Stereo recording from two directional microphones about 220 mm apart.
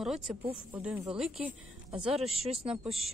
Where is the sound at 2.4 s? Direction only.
25° right (ahead or behind).